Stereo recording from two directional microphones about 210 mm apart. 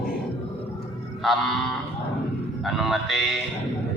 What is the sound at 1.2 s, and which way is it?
Music, centre (ahead or behind).